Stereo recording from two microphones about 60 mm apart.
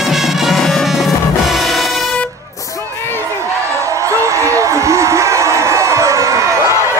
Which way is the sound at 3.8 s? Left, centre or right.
Right.